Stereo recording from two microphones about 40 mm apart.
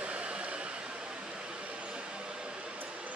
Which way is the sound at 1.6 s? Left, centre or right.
Right.